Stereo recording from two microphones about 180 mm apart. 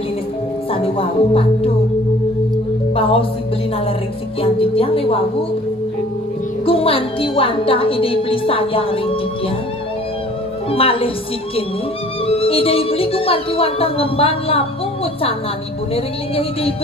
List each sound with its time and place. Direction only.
0.7 s speech: 30° left (ahead or behind)
3.0 s music: 30° left (ahead or behind)
4.4 s speech: 30° left (ahead or behind)
6.6 s a woman's voice: 30° left (ahead or behind)
10.7 s speech: 30° left (ahead or behind)
12.3 s speech: 30° left (ahead or behind)
15.9 s speech: 30° left (ahead or behind)